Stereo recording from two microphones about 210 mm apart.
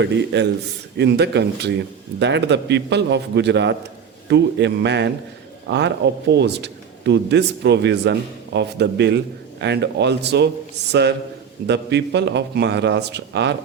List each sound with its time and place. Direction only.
0.0 s speech: 55° right (ahead or behind)
11.6 s speech: 55° right (ahead or behind)